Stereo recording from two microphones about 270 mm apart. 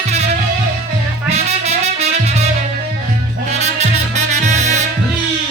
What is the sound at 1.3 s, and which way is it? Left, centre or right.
Music, right.